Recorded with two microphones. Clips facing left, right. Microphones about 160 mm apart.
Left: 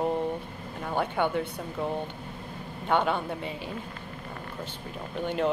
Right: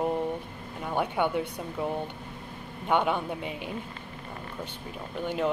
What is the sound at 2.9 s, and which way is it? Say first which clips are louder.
Speech: even; 15° right (ahead or behind).